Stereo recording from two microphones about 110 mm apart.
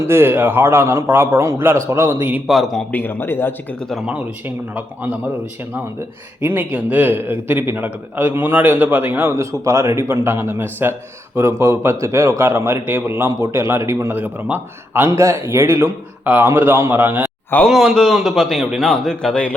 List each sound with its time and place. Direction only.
0.0 s a man's voice: 20° right (ahead or behind)
2.5 s a man's voice: centre (ahead or behind)
2.9 s speech: 15° left (ahead or behind)
3.8 s a man's voice: centre (ahead or behind)
4.1 s speech: 10° right (ahead or behind)
6.4 s a man's voice: 15° right (ahead or behind)
17.7 s a man's voice: centre (ahead or behind)